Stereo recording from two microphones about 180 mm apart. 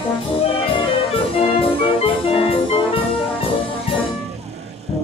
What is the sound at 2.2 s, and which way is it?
Music, 30° left (ahead or behind).